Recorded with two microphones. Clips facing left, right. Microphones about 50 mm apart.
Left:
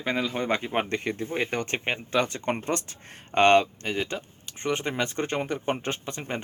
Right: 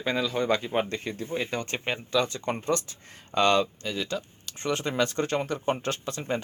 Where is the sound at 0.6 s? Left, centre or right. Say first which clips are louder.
Left 1 dB; left.